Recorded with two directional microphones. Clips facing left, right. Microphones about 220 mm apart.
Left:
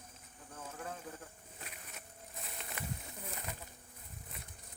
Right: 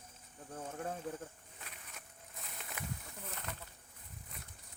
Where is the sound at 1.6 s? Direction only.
35° left (ahead or behind).